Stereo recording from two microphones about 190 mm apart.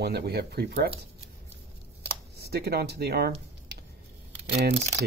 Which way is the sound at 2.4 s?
60° right (ahead or behind).